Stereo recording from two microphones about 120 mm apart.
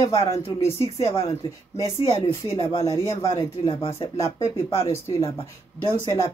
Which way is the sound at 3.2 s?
50° left (ahead or behind).